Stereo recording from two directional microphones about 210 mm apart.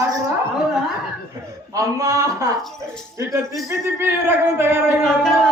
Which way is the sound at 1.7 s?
15° right (ahead or behind).